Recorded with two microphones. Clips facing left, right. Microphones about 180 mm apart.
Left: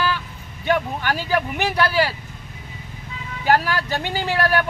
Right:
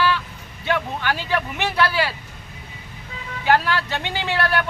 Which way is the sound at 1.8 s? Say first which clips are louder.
Left 1 dB; 40° left (ahead or behind).